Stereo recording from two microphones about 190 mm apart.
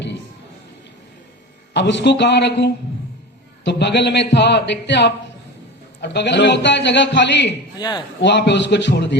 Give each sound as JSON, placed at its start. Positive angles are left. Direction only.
{"t": 1.7, "sound": "a man's voice", "side_deg": 65}
{"t": 7.8, "sound": "speech", "side_deg": 20}
{"t": 8.2, "sound": "a man's voice", "side_deg": 65}